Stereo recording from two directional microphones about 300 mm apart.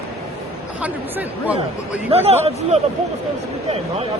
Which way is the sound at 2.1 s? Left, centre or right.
Right.